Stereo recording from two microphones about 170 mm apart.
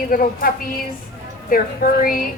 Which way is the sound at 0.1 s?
55° left (ahead or behind).